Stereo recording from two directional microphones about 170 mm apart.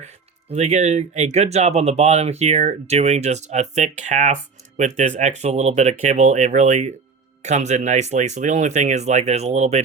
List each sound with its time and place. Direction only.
0.0 s speech: 40° right (ahead or behind)